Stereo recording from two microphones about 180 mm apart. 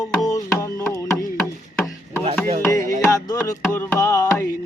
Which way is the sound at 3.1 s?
20° left (ahead or behind).